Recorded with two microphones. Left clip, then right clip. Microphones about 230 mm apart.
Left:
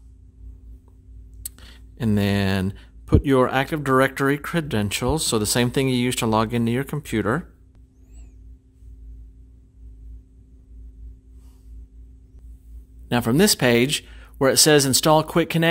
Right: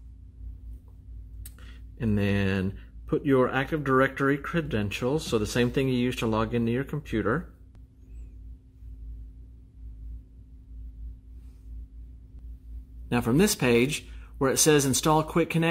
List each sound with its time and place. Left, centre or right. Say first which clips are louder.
1.4 s speech: left 10 dB; left
13.1 s speech: left 5 dB; left